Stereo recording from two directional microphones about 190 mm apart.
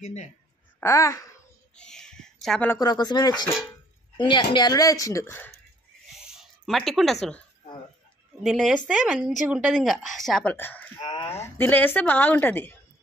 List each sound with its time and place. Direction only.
0.0 s a woman's voice: 40° left (ahead or behind)
0.7 s speech: 15° left (ahead or behind)
1.8 s speech: 5° left (ahead or behind)
2.8 s a woman's voice: 20° left (ahead or behind)
6.2 s a sound: centre (ahead or behind)
8.4 s speech: centre (ahead or behind)
11.0 s speech: 25° left (ahead or behind)
11.2 s a woman's voice: 15° left (ahead or behind)